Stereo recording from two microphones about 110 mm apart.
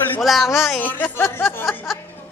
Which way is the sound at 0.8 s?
15° left (ahead or behind).